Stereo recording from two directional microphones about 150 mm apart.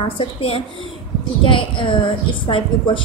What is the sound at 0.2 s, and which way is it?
A woman's voice, 40° left (ahead or behind).